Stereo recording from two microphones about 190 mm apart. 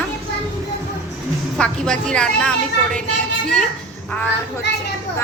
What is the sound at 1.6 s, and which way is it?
A woman's voice, 5° left (ahead or behind).